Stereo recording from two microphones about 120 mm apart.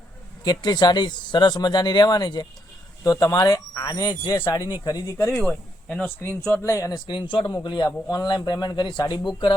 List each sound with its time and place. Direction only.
0.4 s speech: 35° left (ahead or behind)
5.4 s speech: 5° left (ahead or behind)
6.2 s speech: 20° left (ahead or behind)
7.1 s speech: 40° left (ahead or behind)